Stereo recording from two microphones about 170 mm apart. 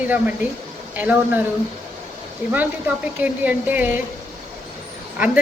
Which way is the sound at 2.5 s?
10° right (ahead or behind).